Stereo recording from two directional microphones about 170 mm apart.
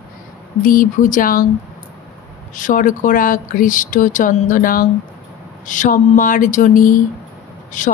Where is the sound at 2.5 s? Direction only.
50° left (ahead or behind).